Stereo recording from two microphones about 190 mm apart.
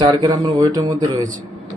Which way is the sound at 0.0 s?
20° right (ahead or behind).